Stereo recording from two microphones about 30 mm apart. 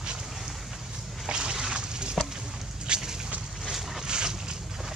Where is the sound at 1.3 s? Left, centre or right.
Right.